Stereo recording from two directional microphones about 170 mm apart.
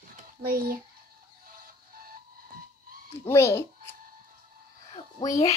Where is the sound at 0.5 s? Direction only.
60° right (ahead or behind).